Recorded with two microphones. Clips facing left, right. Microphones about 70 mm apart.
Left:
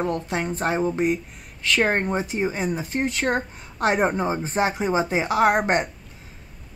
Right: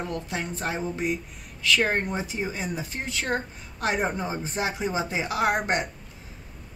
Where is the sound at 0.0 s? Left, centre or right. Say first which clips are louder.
Left 6 dB; left.